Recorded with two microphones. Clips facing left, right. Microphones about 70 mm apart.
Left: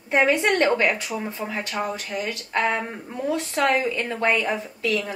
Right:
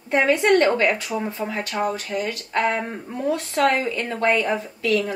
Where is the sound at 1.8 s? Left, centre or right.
Left.